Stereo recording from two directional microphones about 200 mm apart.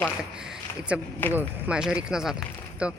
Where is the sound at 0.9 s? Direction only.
5° right (ahead or behind).